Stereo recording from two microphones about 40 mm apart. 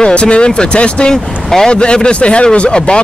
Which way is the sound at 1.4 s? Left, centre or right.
Centre.